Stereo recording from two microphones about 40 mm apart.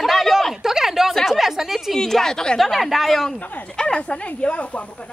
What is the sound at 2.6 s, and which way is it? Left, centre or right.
Speech, centre.